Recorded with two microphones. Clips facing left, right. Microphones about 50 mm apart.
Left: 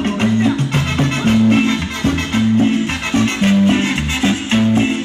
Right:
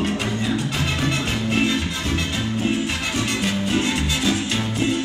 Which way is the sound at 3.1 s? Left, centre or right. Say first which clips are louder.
Left 12 dB; left.